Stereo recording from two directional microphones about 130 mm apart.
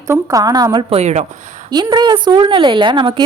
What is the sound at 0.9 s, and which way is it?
Speech, 60° right (ahead or behind).